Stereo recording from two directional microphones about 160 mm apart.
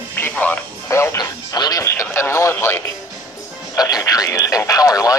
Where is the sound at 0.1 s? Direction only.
10° left (ahead or behind).